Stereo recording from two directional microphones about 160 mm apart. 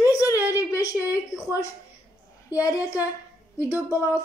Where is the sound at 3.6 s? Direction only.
10° right (ahead or behind).